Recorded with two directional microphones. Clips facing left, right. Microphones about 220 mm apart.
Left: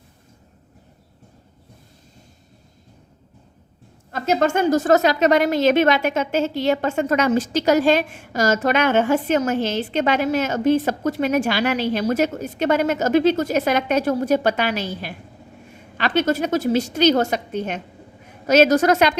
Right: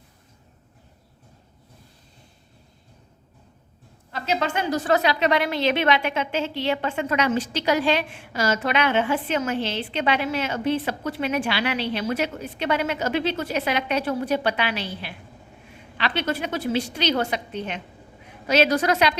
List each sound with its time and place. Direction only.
4.1 s a woman's voice: 45° left (ahead or behind)